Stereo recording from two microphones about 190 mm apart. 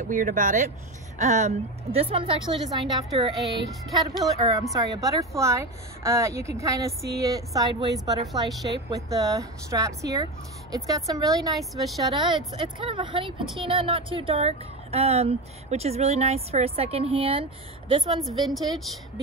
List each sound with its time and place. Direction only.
0.0 s a woman's voice: 45° right (ahead or behind); by 3.0 s 25° right (ahead or behind)
3.3 s speech: centre (ahead or behind)
4.7 s a woman's voice: 20° right (ahead or behind)
11.5 s speech: centre (ahead or behind)
12.0 s a woman's voice: 25° right (ahead or behind)
18.3 s speech: centre (ahead or behind)